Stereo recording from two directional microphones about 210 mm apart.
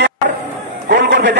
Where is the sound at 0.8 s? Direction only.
55° right (ahead or behind).